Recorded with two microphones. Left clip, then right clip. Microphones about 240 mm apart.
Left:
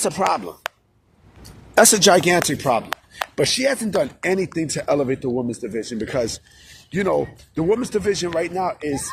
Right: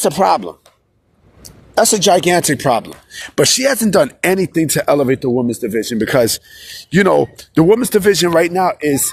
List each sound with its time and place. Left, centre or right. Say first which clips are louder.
0.0 s speech: right 7 dB; right
1.7 s speech: right 1 dB; centre
2.0 s speech: right 3 dB; centre
2.6 s speech: right 5 dB; right